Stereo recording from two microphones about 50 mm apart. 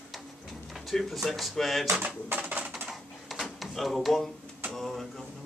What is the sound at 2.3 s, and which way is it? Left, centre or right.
Music, right.